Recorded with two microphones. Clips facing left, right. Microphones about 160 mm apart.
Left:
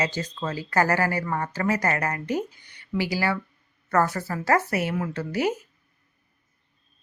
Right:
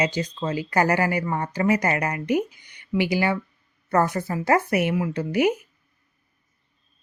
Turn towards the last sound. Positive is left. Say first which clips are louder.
# right 4 dB
turn(degrees=-15)  # may be behind; listen again after turning